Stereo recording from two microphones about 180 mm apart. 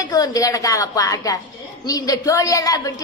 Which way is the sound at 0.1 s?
20° left (ahead or behind).